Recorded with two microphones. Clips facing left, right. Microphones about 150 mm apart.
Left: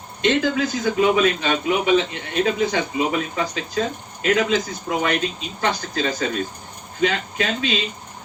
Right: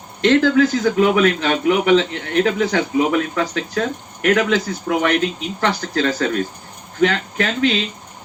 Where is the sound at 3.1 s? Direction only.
75° right (ahead or behind).